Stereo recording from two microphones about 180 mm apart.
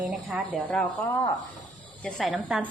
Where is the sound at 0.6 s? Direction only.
10° left (ahead or behind).